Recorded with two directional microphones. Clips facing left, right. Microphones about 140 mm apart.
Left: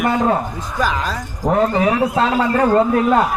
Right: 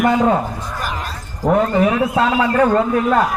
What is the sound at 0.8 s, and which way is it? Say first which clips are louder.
Speech: left 8 dB; 90° left.